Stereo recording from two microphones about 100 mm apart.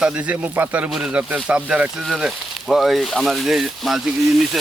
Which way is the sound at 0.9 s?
5° right (ahead or behind).